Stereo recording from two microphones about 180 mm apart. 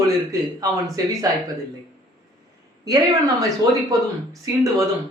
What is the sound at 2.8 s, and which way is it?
A man's voice, 20° right (ahead or behind).